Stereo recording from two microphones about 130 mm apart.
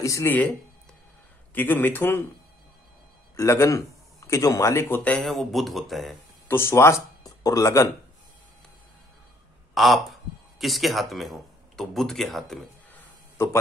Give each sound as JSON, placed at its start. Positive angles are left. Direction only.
{"t": 0.0, "sound": "speech", "side_deg": 20}
{"t": 3.3, "sound": "speech", "side_deg": 25}
{"t": 6.4, "sound": "speech", "side_deg": 20}
{"t": 9.8, "sound": "speech", "side_deg": 0}
{"t": 13.4, "sound": "a man's voice", "side_deg": 20}